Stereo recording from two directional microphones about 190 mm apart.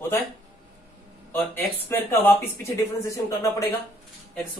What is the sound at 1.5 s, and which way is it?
Speech, 10° left (ahead or behind).